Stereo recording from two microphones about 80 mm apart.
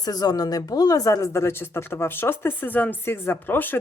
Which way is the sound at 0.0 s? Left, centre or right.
Left.